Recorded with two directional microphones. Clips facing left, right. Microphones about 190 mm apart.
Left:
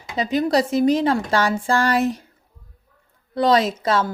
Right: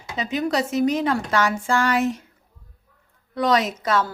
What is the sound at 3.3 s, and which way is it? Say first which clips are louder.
Speech: left 3 dB; 30° left (ahead or behind).